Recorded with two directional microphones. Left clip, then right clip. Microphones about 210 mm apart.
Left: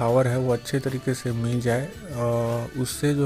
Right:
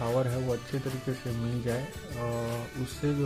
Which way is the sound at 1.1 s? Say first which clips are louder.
Left 7 dB; 15° left (ahead or behind).